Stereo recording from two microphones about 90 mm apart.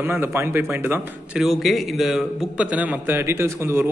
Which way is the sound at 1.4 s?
Centre (ahead or behind).